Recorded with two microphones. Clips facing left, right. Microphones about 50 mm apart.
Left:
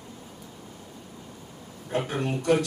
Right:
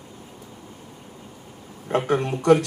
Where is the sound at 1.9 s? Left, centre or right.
Right.